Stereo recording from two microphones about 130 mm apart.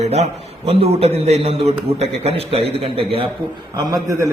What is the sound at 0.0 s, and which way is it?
A man's voice, 55° right (ahead or behind).